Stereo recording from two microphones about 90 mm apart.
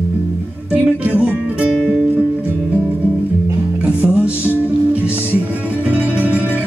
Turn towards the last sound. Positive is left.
turn(degrees=-20)  # may be behind; listen again after turning